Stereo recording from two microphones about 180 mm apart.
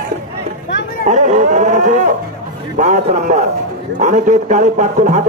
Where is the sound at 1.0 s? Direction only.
40° right (ahead or behind).